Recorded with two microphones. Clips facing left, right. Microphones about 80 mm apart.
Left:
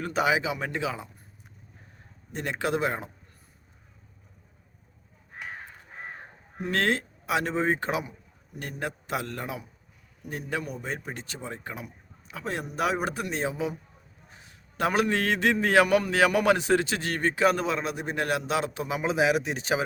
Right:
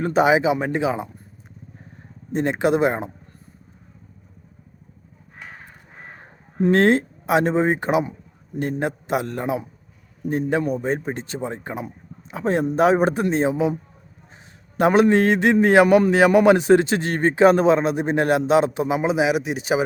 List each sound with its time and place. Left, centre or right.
0.0 s a man's voice: right
2.3 s a man's voice: right
6.7 s a man's voice: right
14.8 s a man's voice: right